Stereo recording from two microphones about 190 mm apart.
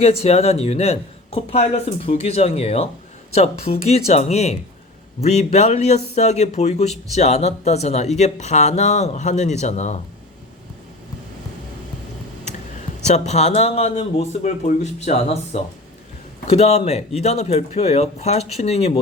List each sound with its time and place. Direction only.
0.0 s speech: 35° left (ahead or behind)
13.1 s speech: 35° left (ahead or behind)